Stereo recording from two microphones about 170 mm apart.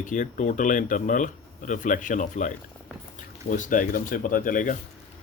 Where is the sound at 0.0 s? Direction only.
50° left (ahead or behind).